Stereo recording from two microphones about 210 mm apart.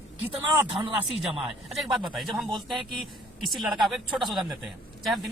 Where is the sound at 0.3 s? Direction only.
25° right (ahead or behind).